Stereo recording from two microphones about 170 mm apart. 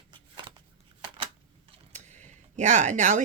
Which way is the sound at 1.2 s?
30° right (ahead or behind).